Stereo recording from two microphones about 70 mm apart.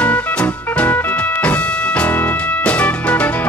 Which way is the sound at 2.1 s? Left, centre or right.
Left.